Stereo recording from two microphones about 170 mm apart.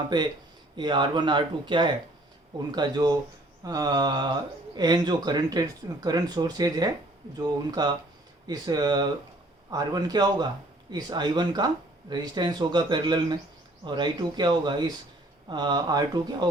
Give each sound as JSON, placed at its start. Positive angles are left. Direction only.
{"t": 0.1, "sound": "speech", "side_deg": -25}